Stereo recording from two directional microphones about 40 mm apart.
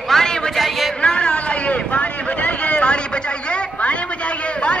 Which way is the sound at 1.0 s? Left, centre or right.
Left.